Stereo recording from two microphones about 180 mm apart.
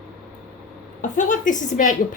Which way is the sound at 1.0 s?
45° left (ahead or behind).